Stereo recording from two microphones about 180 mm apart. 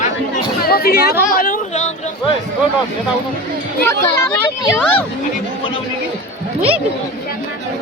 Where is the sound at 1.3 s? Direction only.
50° left (ahead or behind).